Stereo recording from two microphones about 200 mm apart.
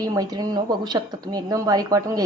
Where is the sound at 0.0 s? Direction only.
20° right (ahead or behind).